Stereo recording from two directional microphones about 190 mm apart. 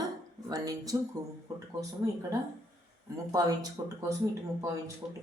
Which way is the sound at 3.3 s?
20° right (ahead or behind).